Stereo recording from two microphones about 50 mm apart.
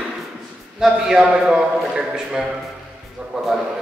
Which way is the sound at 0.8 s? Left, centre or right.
Centre.